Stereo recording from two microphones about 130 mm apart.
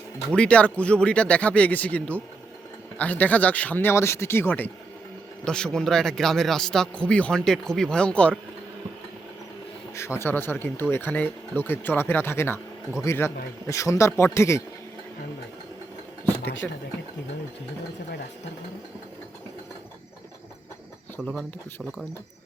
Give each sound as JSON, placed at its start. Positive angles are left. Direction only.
{"t": 0.3, "sound": "speech", "side_deg": 10}
{"t": 10.2, "sound": "a man's voice", "side_deg": 15}
{"t": 16.6, "sound": "speech", "side_deg": 5}
{"t": 21.2, "sound": "speech", "side_deg": 0}